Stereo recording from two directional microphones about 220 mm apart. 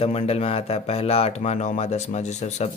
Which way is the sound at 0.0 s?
30° left (ahead or behind).